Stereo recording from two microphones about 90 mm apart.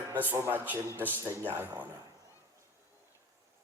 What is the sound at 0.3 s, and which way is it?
A man's voice, 25° right (ahead or behind).